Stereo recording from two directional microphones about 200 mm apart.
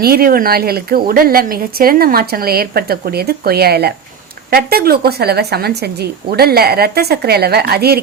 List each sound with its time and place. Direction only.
0.0 s a woman's voice: 50° right (ahead or behind)